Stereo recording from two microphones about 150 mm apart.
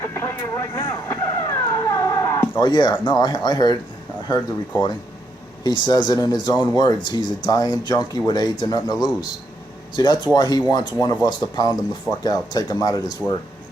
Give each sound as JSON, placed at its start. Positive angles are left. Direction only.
{"t": 0.0, "sound": "speech", "side_deg": 20}
{"t": 0.9, "sound": "a sound", "side_deg": 20}
{"t": 3.0, "sound": "speech", "side_deg": 30}
{"t": 5.6, "sound": "speech", "side_deg": 30}